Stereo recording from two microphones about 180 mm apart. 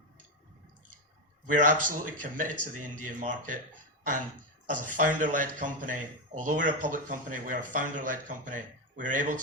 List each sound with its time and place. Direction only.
1.5 s speech: 45° right (ahead or behind)
4.7 s speech: 45° right (ahead or behind)